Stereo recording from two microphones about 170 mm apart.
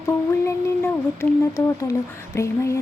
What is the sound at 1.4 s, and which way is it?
Speech, 20° left (ahead or behind).